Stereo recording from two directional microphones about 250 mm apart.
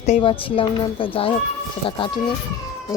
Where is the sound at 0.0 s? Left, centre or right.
Left.